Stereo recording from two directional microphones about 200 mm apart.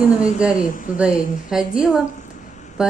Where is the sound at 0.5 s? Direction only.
40° left (ahead or behind).